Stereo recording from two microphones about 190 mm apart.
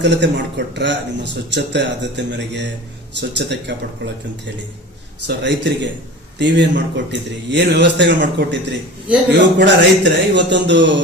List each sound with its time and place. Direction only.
0.0 s a man's voice: 65° right (ahead or behind)
9.6 s a man's voice: 65° right (ahead or behind)